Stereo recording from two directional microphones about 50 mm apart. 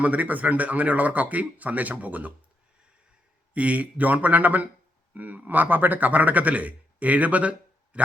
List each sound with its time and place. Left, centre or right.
0.0 s a man's voice: right
3.5 s a man's voice: right